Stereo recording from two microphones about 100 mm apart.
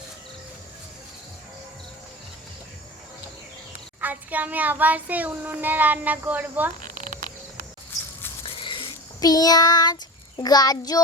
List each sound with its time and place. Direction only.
4.0 s a child's voice: 15° right (ahead or behind)
8.4 s a sound: 65° left (ahead or behind)
9.2 s child singing: 40° left (ahead or behind)